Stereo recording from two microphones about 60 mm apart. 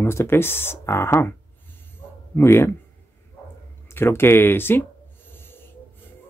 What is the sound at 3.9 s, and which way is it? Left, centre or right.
Speech, left.